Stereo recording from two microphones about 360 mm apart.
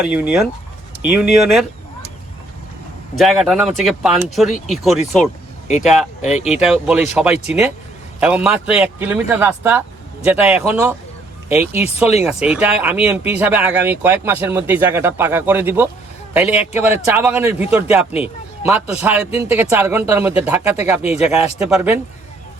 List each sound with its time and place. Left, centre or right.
0.0 s speech: centre
3.2 s speech: centre
6.2 s speech: centre
6.6 s speech: centre